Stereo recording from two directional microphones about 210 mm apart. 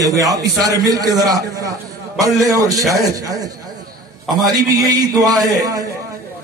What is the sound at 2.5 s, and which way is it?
Speech, 15° right (ahead or behind).